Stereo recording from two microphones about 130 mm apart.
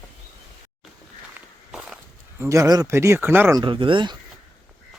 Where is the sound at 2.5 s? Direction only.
25° right (ahead or behind).